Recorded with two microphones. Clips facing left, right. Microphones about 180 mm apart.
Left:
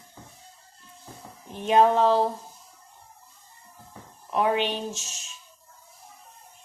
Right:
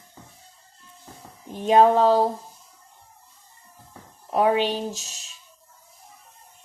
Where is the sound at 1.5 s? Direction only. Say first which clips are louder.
Right 3 dB; 40° right (ahead or behind).